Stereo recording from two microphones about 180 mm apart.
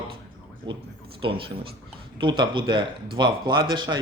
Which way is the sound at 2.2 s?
25° right (ahead or behind).